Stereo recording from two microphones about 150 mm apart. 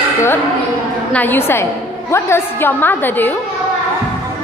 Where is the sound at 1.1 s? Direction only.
10° left (ahead or behind).